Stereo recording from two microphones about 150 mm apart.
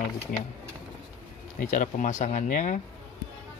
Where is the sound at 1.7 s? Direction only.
55° left (ahead or behind).